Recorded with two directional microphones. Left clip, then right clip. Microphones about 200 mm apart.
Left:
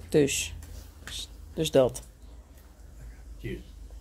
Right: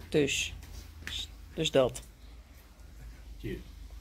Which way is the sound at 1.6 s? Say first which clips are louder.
Left 4 dB; 25° left (ahead or behind).